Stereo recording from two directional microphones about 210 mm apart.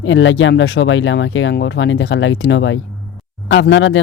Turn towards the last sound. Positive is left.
turn(degrees=60)  # may be behind; listen again after turning